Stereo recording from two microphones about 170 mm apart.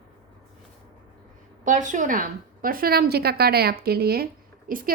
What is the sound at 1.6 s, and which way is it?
A woman's voice, 50° right (ahead or behind).